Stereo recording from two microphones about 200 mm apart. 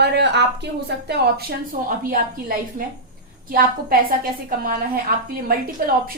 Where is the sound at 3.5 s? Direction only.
45° right (ahead or behind).